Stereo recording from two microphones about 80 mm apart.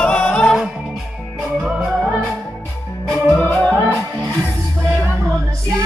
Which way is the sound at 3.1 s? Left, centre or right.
Left.